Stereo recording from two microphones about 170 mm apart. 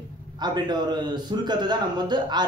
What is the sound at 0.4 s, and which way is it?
Speech, 25° right (ahead or behind).